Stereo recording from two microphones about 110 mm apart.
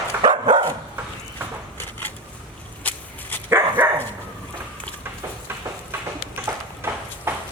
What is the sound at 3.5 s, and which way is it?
Dog, 20° right (ahead or behind).